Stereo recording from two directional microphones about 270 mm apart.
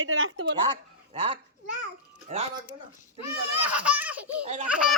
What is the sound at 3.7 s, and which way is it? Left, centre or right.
Baby laughter, centre.